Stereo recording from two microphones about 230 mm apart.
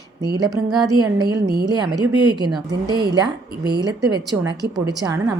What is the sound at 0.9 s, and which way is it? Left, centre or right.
A woman's voice, centre.